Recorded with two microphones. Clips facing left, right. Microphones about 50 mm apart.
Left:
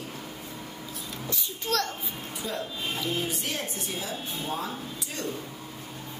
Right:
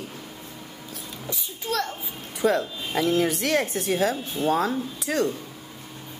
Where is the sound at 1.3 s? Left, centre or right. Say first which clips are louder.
Right 1 dB; centre.